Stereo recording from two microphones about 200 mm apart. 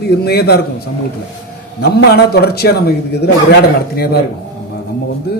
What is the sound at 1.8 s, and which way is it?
A man's voice, 55° left (ahead or behind).